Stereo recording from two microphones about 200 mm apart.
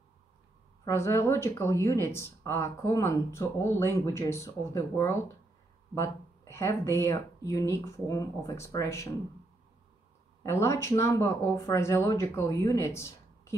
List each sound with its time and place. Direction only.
0.8 s speech: 15° left (ahead or behind)
10.4 s speech: 15° left (ahead or behind)